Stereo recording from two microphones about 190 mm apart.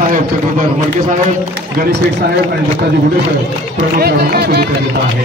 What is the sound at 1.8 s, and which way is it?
A man's voice, 55° right (ahead or behind).